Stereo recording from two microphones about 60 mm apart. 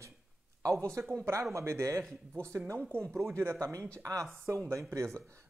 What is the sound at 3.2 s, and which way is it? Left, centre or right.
Speech, right.